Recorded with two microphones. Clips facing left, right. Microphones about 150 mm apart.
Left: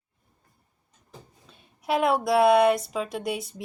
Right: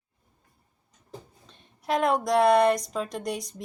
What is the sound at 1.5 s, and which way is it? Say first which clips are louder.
A woman's voice: left 1 dB; 5° left (ahead or behind).